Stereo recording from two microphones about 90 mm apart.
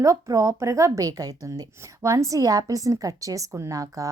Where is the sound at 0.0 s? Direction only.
40° right (ahead or behind).